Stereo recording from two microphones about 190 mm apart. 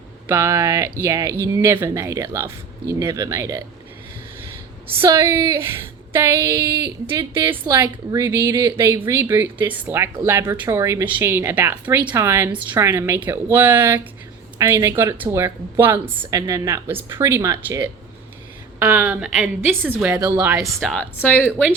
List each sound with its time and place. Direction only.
0.3 s speech: 15° right (ahead or behind)
4.9 s a woman's voice: 15° right (ahead or behind)
20.8 s a woman's voice: centre (ahead or behind)